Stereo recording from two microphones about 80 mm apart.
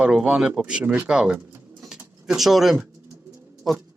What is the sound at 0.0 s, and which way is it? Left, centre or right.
Speech, centre.